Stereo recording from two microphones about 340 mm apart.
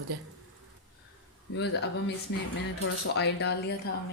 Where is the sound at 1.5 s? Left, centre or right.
Left.